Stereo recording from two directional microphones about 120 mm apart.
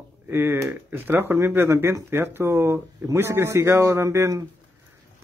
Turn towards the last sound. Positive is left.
turn(degrees=-25)  # may be behind; listen again after turning